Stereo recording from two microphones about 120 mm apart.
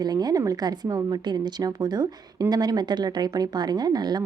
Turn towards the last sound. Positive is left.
turn(degrees=-35)  # may be behind; listen again after turning